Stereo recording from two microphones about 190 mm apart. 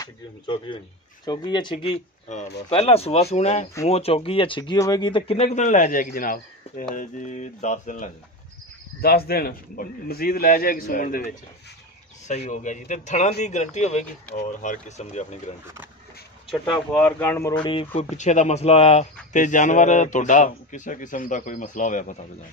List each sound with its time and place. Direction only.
0.0 s speech: 25° left (ahead or behind); by 8.1 s 40° left (ahead or behind)
9.0 s a man's voice: 55° left (ahead or behind); by 15.5 s 35° left (ahead or behind)
16.9 s speech: 10° left (ahead or behind)
17.6 s speech: 30° left (ahead or behind)